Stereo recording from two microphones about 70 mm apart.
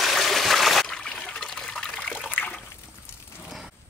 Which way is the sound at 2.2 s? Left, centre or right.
Left.